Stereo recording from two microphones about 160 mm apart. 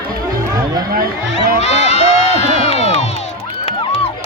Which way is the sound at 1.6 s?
40° left (ahead or behind).